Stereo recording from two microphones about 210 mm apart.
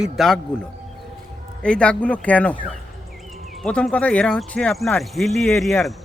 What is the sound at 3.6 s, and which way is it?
Speech, 5° left (ahead or behind).